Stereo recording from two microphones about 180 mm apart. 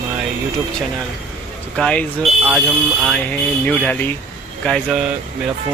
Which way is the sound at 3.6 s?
5° left (ahead or behind).